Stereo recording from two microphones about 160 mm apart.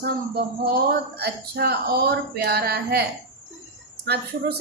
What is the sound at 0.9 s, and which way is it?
Speech, 80° right.